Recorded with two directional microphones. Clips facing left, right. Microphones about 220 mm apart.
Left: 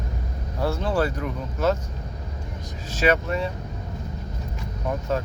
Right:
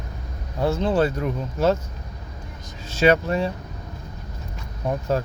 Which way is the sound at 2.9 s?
30° right (ahead or behind).